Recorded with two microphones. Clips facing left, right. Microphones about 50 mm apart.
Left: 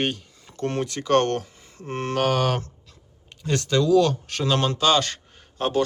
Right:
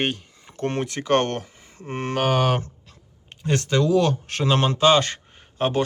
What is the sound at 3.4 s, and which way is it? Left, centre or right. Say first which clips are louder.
Speech: even; right.